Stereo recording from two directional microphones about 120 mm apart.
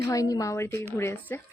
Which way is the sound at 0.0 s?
30° left (ahead or behind).